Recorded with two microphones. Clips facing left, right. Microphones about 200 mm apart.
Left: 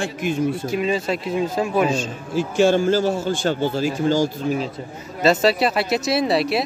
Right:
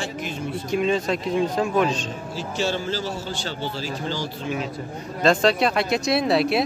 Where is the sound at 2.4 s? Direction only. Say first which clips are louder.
Left 10 dB; 50° left (ahead or behind).